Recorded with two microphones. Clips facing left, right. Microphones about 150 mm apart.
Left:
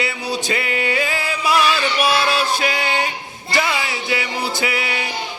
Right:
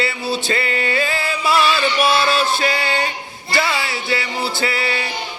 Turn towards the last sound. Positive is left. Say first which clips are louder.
# right 1 dB
turn(degrees=15)  # may be behind; listen again after turning